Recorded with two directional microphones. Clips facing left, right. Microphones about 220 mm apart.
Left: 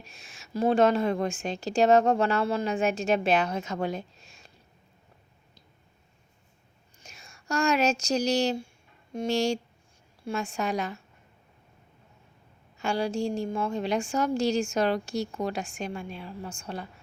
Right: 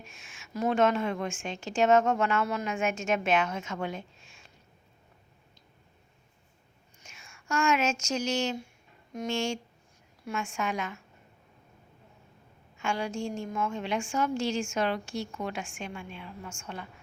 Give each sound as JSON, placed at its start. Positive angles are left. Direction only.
{"t": 0.0, "sound": "a woman's voice", "side_deg": 35}
{"t": 7.0, "sound": "a woman's voice", "side_deg": 35}
{"t": 12.7, "sound": "a woman's voice", "side_deg": 35}